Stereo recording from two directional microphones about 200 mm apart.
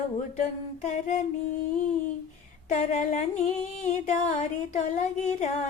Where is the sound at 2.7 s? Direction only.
35° left (ahead or behind).